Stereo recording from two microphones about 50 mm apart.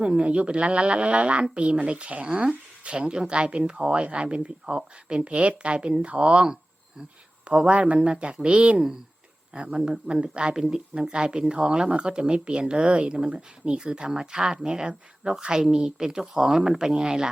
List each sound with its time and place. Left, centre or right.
0.0 s speech: centre